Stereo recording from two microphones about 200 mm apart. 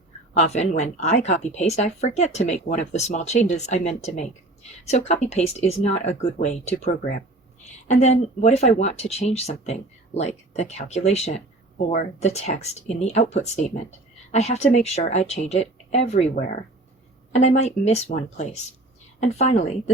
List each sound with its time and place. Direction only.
0.3 s speech: 35° left (ahead or behind)
7.9 s speech: 35° left (ahead or behind)